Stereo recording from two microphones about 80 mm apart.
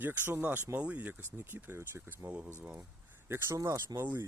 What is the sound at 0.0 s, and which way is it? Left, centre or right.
Speech, right.